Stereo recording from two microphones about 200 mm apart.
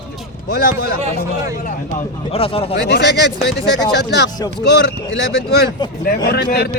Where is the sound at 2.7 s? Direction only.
60° left (ahead or behind).